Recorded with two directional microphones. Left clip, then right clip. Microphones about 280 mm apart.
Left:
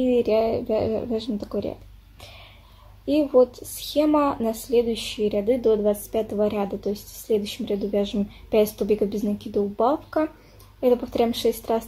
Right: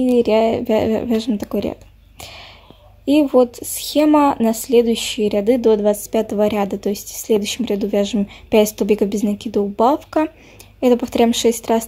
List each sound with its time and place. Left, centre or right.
0.1 s speech: right